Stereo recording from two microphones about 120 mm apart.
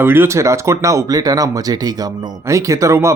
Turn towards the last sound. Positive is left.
turn(degrees=-25)  # may be behind; listen again after turning